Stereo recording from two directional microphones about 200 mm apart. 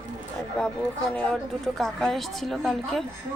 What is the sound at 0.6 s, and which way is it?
A woman's voice, 5° left (ahead or behind).